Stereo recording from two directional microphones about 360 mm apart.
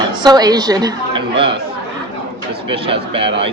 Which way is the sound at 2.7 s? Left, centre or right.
Centre.